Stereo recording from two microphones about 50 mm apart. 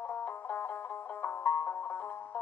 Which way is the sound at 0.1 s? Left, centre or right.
Left.